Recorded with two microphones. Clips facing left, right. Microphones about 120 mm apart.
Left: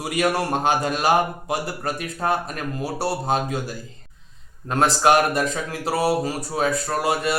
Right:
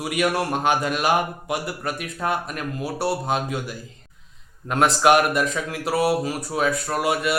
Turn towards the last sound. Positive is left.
turn(degrees=35)  # may be behind; listen again after turning